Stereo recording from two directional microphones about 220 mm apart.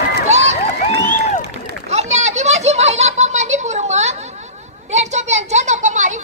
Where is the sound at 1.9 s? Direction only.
30° right (ahead or behind).